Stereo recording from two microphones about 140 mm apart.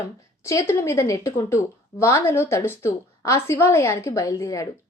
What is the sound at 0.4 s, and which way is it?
A woman's voice, 20° left (ahead or behind).